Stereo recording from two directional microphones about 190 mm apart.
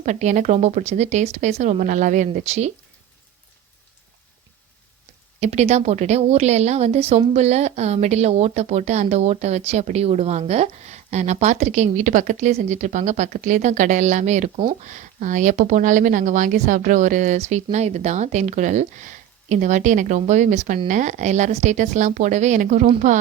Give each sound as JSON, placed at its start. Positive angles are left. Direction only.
{"t": 0.0, "sound": "a woman's voice", "side_deg": -40}
{"t": 5.4, "sound": "a woman's voice", "side_deg": -35}